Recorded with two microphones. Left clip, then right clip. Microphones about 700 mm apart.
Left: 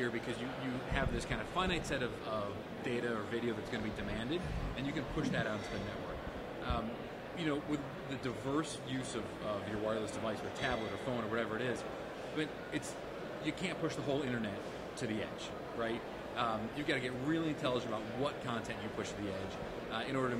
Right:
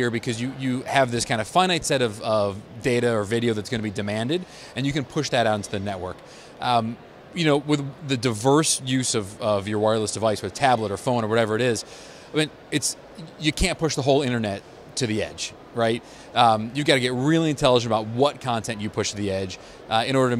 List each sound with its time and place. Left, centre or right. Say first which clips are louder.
0.0 s a man's voice: right 12 dB; right
7.3 s a man's voice: right 17 dB; right
13.4 s a man's voice: right 16 dB; right